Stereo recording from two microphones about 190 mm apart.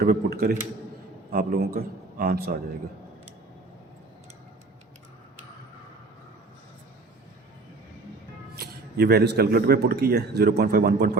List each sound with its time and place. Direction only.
0.0 s a man's voice: 55° right (ahead or behind)
8.5 s speech: 55° right (ahead or behind)